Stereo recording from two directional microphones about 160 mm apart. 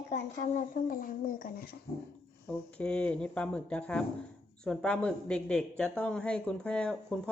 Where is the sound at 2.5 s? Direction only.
5° left (ahead or behind).